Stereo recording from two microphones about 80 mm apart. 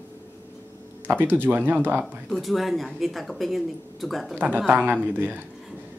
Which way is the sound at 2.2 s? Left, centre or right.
Centre.